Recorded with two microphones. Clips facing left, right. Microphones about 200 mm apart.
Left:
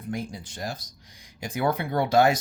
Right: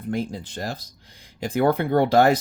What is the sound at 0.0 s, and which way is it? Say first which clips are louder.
Speech: right 5 dB; 60° right (ahead or behind).